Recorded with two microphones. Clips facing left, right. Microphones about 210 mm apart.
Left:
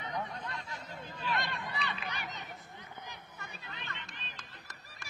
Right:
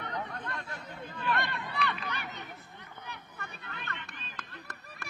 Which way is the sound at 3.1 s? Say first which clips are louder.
Right 3 dB; 60° right (ahead or behind).